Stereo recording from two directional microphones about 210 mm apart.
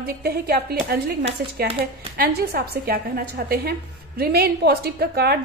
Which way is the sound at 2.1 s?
50° right (ahead or behind).